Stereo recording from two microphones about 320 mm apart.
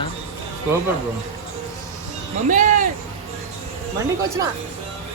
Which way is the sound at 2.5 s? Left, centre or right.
Right.